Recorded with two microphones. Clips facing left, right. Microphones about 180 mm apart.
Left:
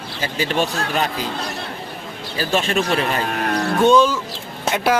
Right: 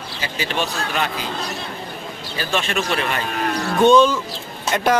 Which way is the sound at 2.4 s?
40° left (ahead or behind).